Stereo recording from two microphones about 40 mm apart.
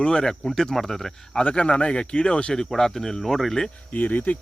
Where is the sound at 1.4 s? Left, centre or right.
Left.